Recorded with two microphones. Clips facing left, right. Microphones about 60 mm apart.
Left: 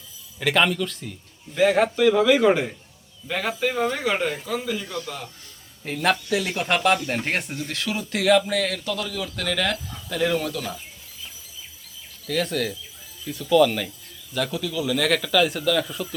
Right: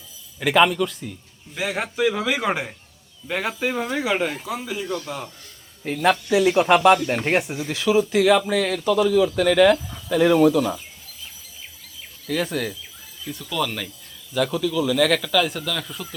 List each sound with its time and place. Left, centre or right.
0.3 s a man's voice: centre
5.8 s a man's voice: centre
12.3 s a man's voice: centre